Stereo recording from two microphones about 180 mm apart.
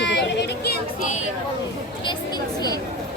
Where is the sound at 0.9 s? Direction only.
45° left (ahead or behind).